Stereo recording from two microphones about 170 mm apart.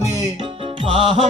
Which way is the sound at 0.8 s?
30° right (ahead or behind).